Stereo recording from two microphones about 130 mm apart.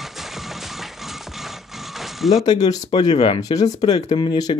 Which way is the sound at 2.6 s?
30° left (ahead or behind).